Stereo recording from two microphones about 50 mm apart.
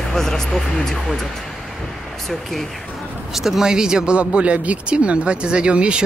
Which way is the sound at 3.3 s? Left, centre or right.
Centre.